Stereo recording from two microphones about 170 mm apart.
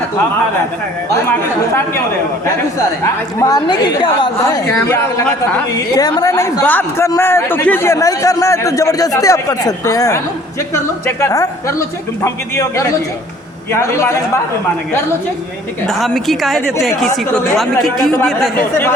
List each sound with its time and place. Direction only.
3.0 s a woman's voice: 20° left (ahead or behind)
15.9 s a woman's voice: centre (ahead or behind)